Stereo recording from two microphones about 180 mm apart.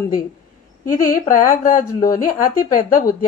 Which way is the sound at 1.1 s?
50° left (ahead or behind).